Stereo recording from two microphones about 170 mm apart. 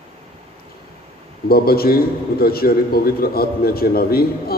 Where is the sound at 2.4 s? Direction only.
65° left (ahead or behind).